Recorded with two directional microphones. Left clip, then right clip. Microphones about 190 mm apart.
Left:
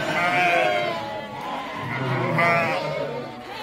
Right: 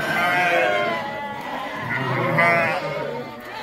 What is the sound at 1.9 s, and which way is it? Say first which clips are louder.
Sheep: right 3 dB; 30° right (ahead or behind).